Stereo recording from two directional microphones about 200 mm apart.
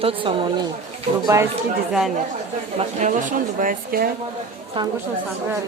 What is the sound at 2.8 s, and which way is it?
Speech, 40° right (ahead or behind).